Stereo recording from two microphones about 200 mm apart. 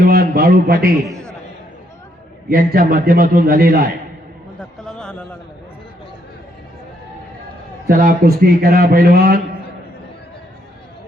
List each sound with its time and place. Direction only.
0.0 s a man's voice: 50° right (ahead or behind)
2.5 s a man's voice: 45° right (ahead or behind)
4.9 s a sound: 5° left (ahead or behind)
7.9 s a man's voice: 45° right (ahead or behind)